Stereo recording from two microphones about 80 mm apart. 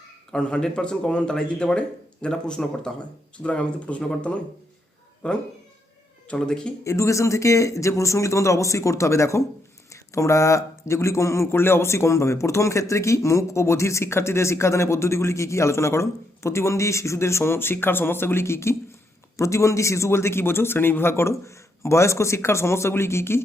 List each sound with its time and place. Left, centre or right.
0.3 s speech: centre
6.8 s speech: left